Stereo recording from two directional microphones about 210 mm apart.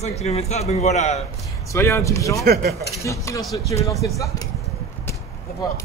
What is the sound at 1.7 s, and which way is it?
Speech, 15° left (ahead or behind).